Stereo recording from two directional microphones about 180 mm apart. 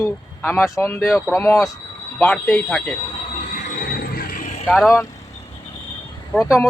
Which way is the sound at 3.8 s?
55° left (ahead or behind).